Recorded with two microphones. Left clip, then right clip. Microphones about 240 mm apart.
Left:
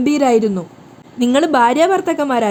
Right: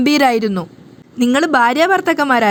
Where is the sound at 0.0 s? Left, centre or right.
Right.